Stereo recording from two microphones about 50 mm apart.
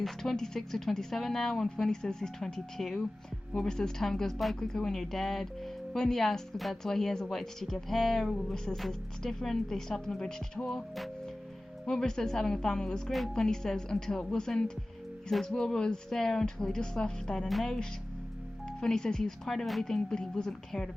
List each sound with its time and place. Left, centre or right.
0.0 s speech: centre
11.9 s speech: centre
13.1 s speech: centre